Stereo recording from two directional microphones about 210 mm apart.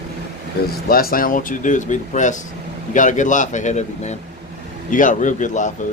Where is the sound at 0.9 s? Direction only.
45° left (ahead or behind).